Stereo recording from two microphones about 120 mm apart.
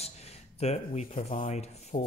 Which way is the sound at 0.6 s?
60° left (ahead or behind).